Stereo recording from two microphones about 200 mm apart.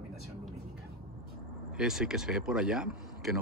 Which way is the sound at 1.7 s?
5° right (ahead or behind).